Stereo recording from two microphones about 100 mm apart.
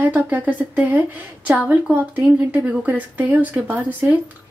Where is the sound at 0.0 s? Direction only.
20° right (ahead or behind).